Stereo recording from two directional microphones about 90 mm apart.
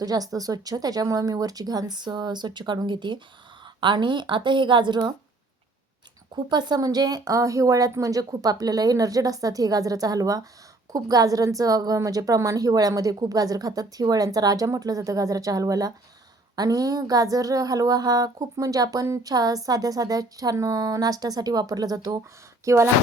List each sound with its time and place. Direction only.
0.0 s speech: 45° right (ahead or behind)
6.3 s a woman's voice: 55° right (ahead or behind)
22.6 s a woman's voice: 30° right (ahead or behind)